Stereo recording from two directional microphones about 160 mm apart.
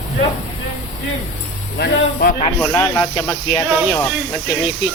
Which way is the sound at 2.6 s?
15° left (ahead or behind).